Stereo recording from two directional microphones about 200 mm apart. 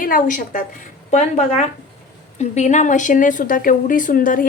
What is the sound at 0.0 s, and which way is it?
A woman's voice, 40° left (ahead or behind).